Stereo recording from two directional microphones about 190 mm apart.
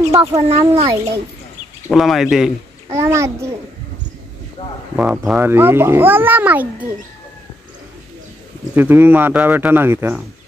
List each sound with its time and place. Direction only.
0.1 s speech: 20° right (ahead or behind)
0.4 s speech: 35° right (ahead or behind)
0.8 s speech: 15° right (ahead or behind)
1.9 s speech: centre (ahead or behind)
2.9 s speech: 15° right (ahead or behind)
4.9 s speech: 10° right (ahead or behind)
8.7 s speech: 10° right (ahead or behind)